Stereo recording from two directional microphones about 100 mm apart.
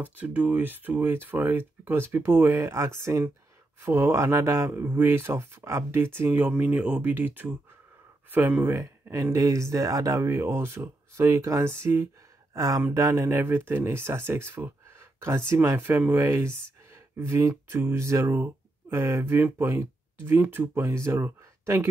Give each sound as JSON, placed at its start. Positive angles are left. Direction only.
{"t": 0.0, "sound": "speech", "side_deg": -15}
{"t": 12.5, "sound": "speech", "side_deg": -35}